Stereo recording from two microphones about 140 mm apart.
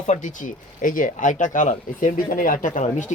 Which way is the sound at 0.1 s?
65° left (ahead or behind).